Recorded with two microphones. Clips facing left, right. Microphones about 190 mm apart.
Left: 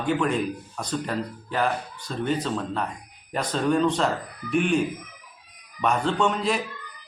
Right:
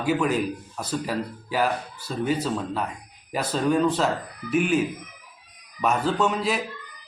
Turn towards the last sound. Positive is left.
turn(degrees=-5)  # may be behind; listen again after turning